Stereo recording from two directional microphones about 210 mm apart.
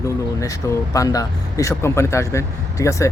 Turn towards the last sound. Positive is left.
turn(degrees=15)  # may be behind; listen again after turning